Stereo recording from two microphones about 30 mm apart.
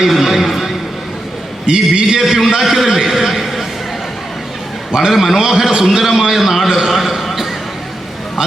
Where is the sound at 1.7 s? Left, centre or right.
Right.